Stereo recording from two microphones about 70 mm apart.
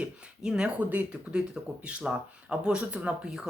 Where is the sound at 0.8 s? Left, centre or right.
Right.